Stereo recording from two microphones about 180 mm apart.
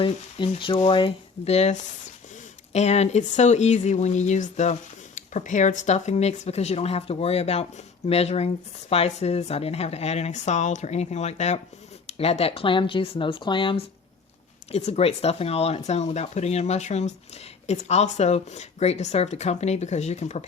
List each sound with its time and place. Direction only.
0.0 s speech: 30° left (ahead or behind)